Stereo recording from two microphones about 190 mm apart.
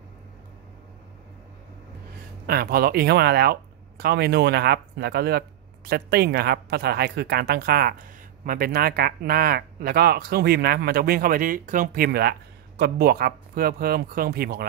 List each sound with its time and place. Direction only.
2.4 s a woman's voice: 55° right (ahead or behind)